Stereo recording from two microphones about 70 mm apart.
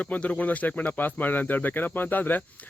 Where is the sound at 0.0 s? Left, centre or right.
Left.